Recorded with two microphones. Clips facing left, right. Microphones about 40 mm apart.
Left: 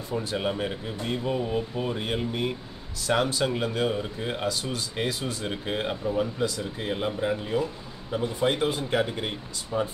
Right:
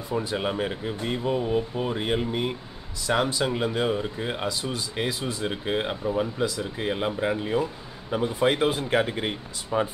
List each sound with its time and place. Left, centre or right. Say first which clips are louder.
0.1 s speech: right 1 dB; centre